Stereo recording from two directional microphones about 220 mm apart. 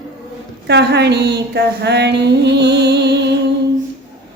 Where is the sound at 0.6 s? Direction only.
50° right (ahead or behind).